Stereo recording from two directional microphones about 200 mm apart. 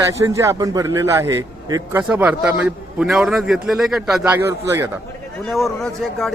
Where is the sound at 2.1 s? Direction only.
5° right (ahead or behind).